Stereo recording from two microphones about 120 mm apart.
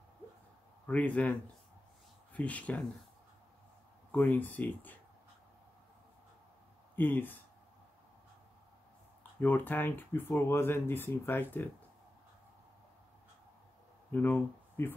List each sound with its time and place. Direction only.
0.8 s speech: 10° left (ahead or behind)
4.1 s speech: 15° left (ahead or behind)
7.0 s speech: 15° left (ahead or behind)
9.4 s speech: 15° left (ahead or behind)
14.1 s speech: 15° left (ahead or behind)